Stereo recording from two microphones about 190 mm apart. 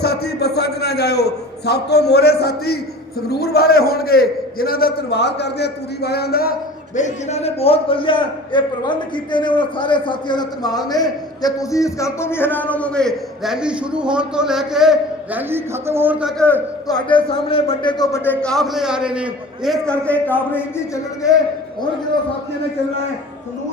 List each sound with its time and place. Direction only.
0.0 s a man's voice: 55° left (ahead or behind); by 16.3 s 10° right (ahead or behind)
16.9 s a man's voice: 25° left (ahead or behind)
18.4 s a man's voice: centre (ahead or behind)